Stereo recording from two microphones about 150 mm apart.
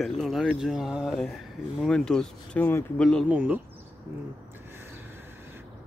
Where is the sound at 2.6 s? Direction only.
15° left (ahead or behind).